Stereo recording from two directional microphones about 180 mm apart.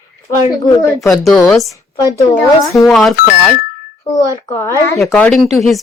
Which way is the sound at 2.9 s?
Centre (ahead or behind).